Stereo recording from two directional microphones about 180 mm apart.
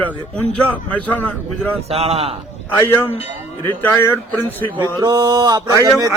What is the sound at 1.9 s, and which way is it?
Speech, 35° right (ahead or behind).